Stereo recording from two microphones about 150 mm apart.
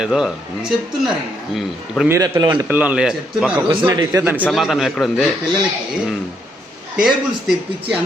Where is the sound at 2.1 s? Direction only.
25° right (ahead or behind).